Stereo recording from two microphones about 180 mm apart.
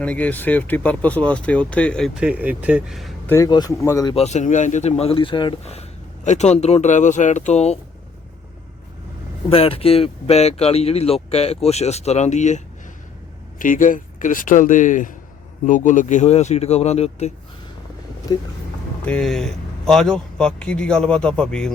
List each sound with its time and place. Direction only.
0.0 s speech: 10° left (ahead or behind)
3.2 s speech: 15° left (ahead or behind)
4.1 s speech: 35° left (ahead or behind)
9.5 s speech: 30° left (ahead or behind)
18.3 s speech: 20° left (ahead or behind)
19.0 s speech: 5° left (ahead or behind)